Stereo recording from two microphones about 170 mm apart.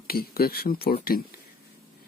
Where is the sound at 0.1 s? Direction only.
65° left (ahead or behind).